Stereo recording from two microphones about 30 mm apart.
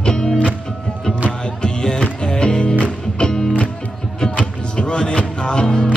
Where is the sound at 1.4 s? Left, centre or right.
Left.